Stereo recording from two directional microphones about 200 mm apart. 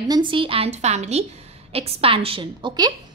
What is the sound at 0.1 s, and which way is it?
A woman's voice, 25° right (ahead or behind).